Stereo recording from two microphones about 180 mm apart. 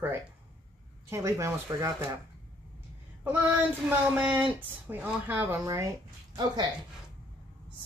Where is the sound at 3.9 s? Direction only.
10° right (ahead or behind).